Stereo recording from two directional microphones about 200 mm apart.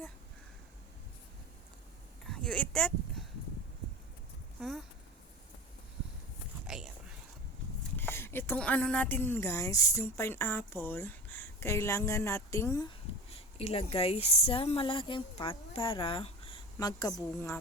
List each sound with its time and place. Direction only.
2.2 s a sound: 5° left (ahead or behind)
4.6 s speech: centre (ahead or behind)
6.7 s whispering: centre (ahead or behind)
7.9 s speech: 10° left (ahead or behind)
13.3 s speech: 30° left (ahead or behind)